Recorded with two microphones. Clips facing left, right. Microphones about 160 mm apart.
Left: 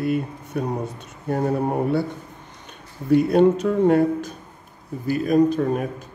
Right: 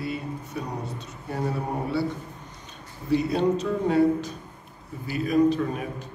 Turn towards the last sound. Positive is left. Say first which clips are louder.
# left 3 dB
turn(degrees=50)  # may be behind; listen again after turning